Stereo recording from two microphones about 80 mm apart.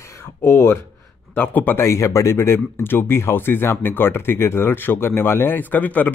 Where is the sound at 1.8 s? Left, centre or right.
Left.